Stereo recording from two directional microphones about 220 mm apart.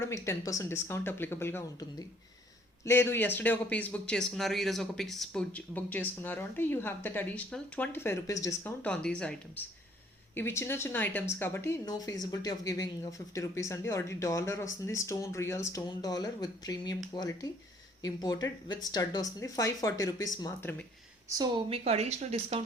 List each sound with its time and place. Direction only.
0.0 s speech: 15° left (ahead or behind)
21.2 s a woman's voice: 15° right (ahead or behind)